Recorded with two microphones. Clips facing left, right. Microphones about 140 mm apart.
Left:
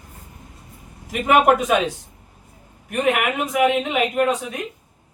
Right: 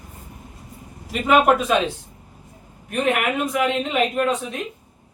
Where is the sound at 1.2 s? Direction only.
15° left (ahead or behind).